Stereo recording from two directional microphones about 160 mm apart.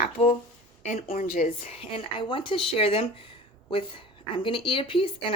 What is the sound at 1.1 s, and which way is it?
A woman's voice, 60° left (ahead or behind).